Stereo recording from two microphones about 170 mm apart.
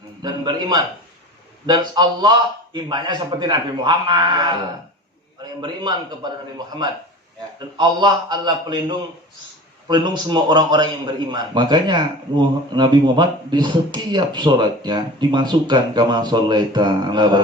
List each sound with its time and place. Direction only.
0.2 s a man's voice: 25° right (ahead or behind)
5.6 s a man's voice: 25° right (ahead or behind)
7.8 s a man's voice: 25° right (ahead or behind)